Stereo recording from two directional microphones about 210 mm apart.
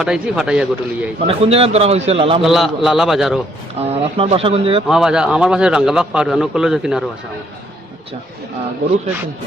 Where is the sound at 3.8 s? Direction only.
30° right (ahead or behind).